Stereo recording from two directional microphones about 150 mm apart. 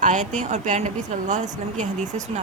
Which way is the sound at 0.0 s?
55° right (ahead or behind).